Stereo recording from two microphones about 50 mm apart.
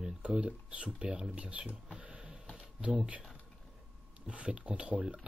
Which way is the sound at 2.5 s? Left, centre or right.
Centre.